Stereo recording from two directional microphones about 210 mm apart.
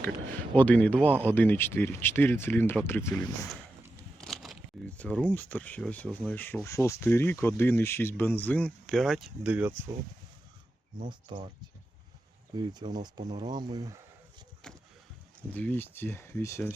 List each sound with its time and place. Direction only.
0.5 s speech: 5° left (ahead or behind)
4.2 s speech: centre (ahead or behind)
11.1 s speech: 20° right (ahead or behind)
12.5 s speech: 20° right (ahead or behind)
14.6 s boat: 5° left (ahead or behind)
15.5 s speech: 10° left (ahead or behind)